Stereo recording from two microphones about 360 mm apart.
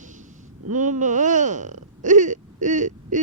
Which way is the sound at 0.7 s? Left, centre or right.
Right.